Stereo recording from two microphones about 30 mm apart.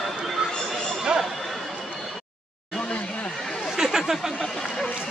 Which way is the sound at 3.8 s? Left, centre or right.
Centre.